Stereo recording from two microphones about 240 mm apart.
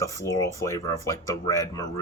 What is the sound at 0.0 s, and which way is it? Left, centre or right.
Speech, centre.